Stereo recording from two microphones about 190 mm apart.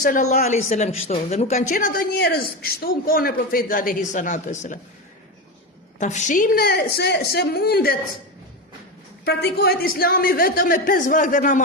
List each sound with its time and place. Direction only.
0.0 s a man's voice: 45° left (ahead or behind)
6.0 s a man's voice: 40° left (ahead or behind)
9.2 s a man's voice: 55° left (ahead or behind)